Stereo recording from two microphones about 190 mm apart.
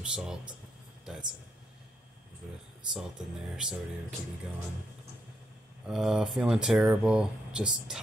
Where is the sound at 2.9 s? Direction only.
5° right (ahead or behind).